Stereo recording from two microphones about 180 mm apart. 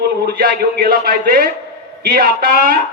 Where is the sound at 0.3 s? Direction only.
60° right (ahead or behind).